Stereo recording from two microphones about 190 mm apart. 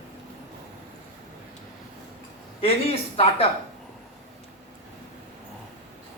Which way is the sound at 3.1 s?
30° left (ahead or behind).